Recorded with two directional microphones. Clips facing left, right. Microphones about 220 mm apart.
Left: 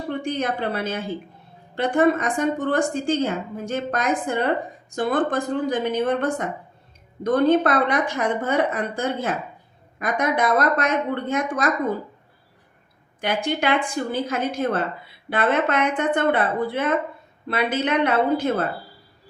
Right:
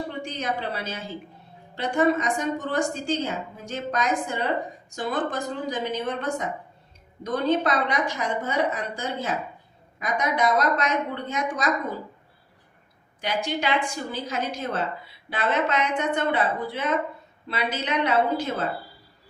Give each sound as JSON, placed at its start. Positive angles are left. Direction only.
{"t": 0.1, "sound": "a woman's voice", "side_deg": 55}
{"t": 13.2, "sound": "a woman's voice", "side_deg": 55}